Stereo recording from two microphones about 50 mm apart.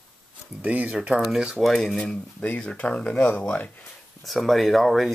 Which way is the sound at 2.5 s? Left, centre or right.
Left.